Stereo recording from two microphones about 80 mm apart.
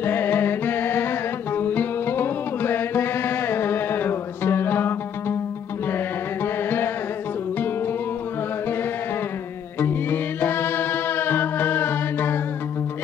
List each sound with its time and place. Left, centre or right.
0.0 s music: left
6.4 s music: left
9.8 s music: left